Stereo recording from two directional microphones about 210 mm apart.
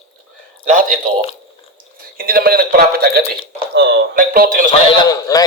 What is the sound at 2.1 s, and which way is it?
A man's voice, 45° right (ahead or behind).